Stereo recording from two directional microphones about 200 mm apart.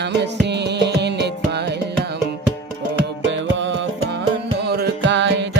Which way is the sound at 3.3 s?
65° right (ahead or behind).